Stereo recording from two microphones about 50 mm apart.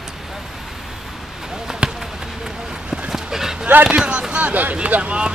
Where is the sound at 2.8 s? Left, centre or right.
Centre.